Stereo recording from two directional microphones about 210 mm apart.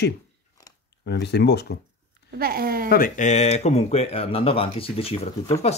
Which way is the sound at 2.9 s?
40° left (ahead or behind).